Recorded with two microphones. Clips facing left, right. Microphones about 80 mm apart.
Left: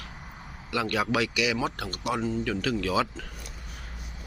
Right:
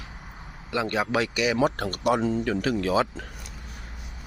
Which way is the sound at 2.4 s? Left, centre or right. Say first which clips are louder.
Right 3 dB; right.